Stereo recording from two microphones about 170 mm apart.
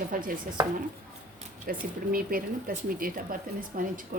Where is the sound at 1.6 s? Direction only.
55° right (ahead or behind).